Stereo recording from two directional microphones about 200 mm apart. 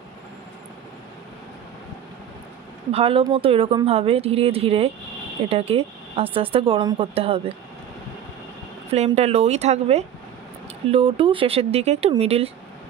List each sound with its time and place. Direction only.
2.9 s a woman's voice: 30° right (ahead or behind)
8.9 s a woman's voice: 30° right (ahead or behind)